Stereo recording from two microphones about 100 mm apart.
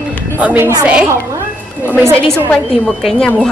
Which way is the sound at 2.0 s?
25° right (ahead or behind).